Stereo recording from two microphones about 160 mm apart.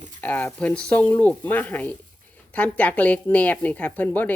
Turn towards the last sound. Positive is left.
turn(degrees=10)  # may be behind; listen again after turning